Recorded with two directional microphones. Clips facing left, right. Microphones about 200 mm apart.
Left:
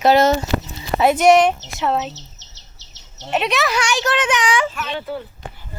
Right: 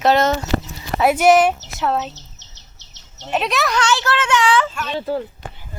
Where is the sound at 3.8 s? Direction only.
15° left (ahead or behind).